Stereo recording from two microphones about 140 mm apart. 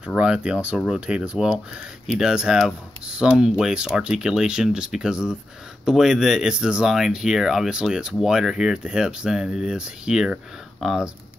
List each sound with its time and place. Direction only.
0.0 s speech: 5° right (ahead or behind)